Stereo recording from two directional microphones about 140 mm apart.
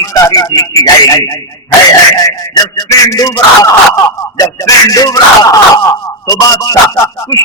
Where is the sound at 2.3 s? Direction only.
25° left (ahead or behind).